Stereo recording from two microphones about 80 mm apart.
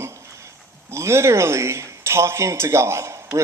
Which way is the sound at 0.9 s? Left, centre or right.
Right.